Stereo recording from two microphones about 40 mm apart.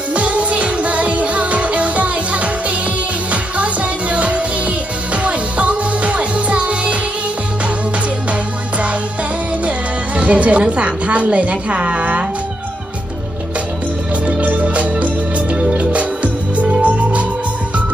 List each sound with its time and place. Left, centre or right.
0.1 s music: right
3.5 s music: right
9.7 s a woman's voice: right
14.4 s music: right